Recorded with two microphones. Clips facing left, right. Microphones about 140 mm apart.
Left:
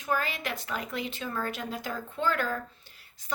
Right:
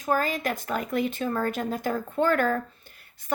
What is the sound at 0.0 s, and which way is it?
Speech, 40° right (ahead or behind).